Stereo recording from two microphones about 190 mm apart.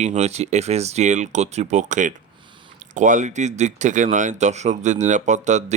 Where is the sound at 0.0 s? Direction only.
35° right (ahead or behind).